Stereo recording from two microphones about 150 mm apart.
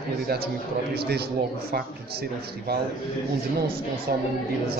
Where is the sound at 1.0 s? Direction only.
90° right.